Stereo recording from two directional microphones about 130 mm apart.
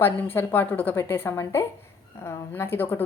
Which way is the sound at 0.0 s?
15° left (ahead or behind).